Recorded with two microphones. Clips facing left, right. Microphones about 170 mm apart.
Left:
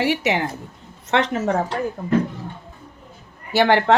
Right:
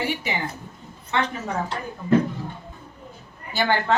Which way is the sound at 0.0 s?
80° left.